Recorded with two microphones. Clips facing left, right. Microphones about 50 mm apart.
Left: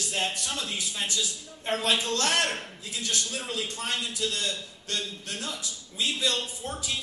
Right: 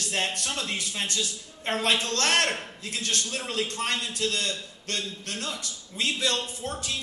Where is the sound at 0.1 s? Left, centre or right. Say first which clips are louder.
Right 2 dB; right.